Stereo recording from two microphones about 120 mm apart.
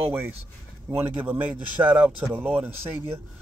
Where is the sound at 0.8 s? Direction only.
20° right (ahead or behind).